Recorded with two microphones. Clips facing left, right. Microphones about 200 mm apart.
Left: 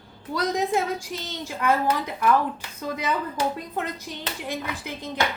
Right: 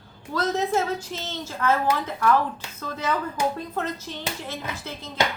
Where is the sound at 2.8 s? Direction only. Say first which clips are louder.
Even; 15° left (ahead or behind).